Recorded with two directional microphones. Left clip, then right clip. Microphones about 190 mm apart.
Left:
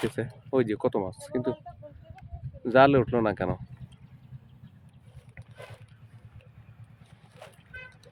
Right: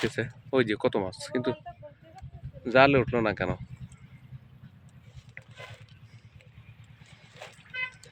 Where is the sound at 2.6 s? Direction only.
25° left (ahead or behind).